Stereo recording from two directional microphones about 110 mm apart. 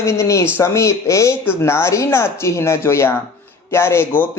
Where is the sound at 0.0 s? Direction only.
25° left (ahead or behind).